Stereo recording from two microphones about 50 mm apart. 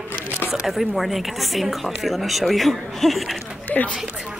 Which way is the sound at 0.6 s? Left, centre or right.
Centre.